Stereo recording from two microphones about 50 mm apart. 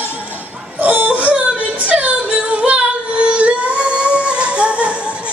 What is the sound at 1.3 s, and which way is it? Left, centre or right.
Child singing, right.